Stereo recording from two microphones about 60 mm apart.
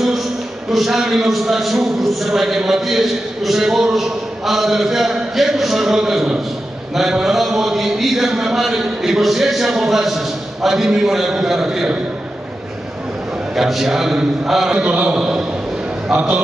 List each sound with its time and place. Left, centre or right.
0.7 s a man's voice: centre
13.6 s a man's voice: centre; by 16.3 s right